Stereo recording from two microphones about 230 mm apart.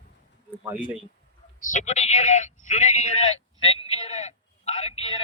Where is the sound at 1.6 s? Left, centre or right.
Left.